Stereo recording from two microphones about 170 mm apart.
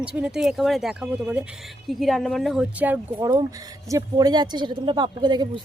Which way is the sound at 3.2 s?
20° right (ahead or behind).